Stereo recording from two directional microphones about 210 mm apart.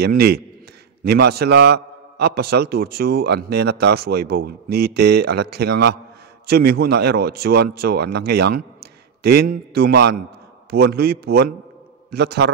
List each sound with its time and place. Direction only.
0.0 s a man's voice: 50° right (ahead or behind)